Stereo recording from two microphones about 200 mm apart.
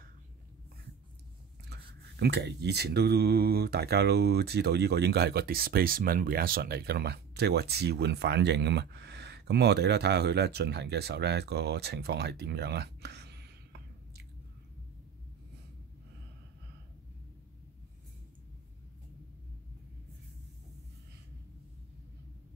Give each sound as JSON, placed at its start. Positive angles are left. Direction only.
{"t": 1.7, "sound": "speech", "side_deg": -55}